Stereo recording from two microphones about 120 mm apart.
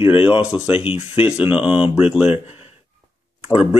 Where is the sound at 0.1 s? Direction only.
50° left (ahead or behind).